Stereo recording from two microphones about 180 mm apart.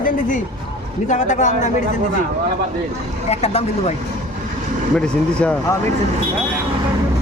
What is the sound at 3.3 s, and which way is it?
Speech, 35° left (ahead or behind).